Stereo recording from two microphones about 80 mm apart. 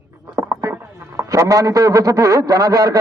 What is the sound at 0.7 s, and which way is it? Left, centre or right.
A man's voice, right.